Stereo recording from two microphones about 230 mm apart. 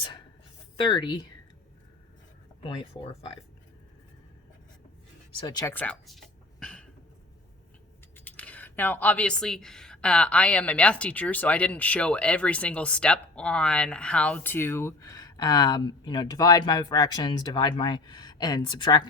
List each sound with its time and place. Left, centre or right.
0.8 s speech: left
2.6 s speech: left
5.4 s speech: centre
8.1 s speech: centre